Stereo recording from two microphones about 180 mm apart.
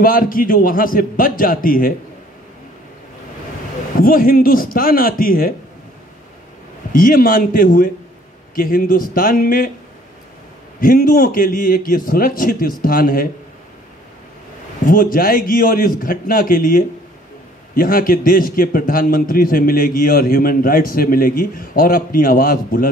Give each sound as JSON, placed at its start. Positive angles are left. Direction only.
{"t": 0.0, "sound": "a man's voice", "side_deg": 50}
{"t": 4.0, "sound": "a man's voice", "side_deg": 50}
{"t": 6.9, "sound": "a man's voice", "side_deg": 50}
{"t": 10.8, "sound": "a man's voice", "side_deg": 50}
{"t": 14.9, "sound": "a man's voice", "side_deg": 50}